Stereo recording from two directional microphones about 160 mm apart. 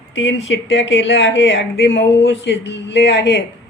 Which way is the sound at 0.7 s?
90° left.